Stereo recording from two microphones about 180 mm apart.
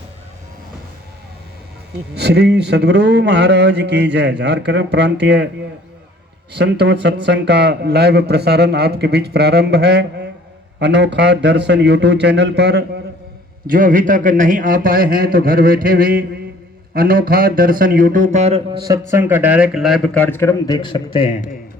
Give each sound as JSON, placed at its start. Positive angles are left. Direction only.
{"t": 2.1, "sound": "a man's voice", "side_deg": -65}
{"t": 6.5, "sound": "a man's voice", "side_deg": -70}
{"t": 13.7, "sound": "a man's voice", "side_deg": -50}
{"t": 18.9, "sound": "speech", "side_deg": -10}
{"t": 20.1, "sound": "a man's voice", "side_deg": 10}